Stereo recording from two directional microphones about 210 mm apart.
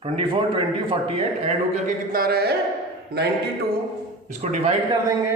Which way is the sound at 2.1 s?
45° right (ahead or behind).